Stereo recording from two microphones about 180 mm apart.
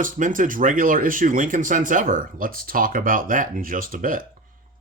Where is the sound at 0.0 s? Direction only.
45° right (ahead or behind).